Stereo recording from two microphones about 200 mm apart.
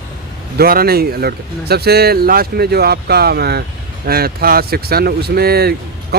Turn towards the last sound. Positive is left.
turn(degrees=-50)  # may be behind; listen again after turning